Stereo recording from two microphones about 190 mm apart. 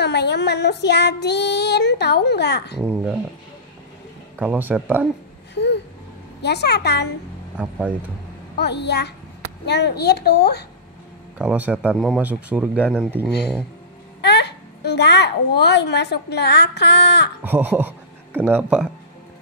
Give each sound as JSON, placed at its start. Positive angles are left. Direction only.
{"t": 0.0, "sound": "child singing", "side_deg": 65}
{"t": 2.8, "sound": "speech", "side_deg": -5}
{"t": 4.4, "sound": "speech", "side_deg": -10}
{"t": 5.5, "sound": "a sound", "side_deg": 65}
{"t": 6.4, "sound": "child singing", "side_deg": 60}
{"t": 8.5, "sound": "child singing", "side_deg": 60}
{"t": 11.3, "sound": "speech", "side_deg": -10}
{"t": 14.2, "sound": "a child's voice", "side_deg": 65}
{"t": 17.4, "sound": "speech", "side_deg": -10}